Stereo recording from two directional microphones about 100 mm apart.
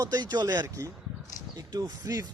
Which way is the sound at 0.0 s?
40° right (ahead or behind).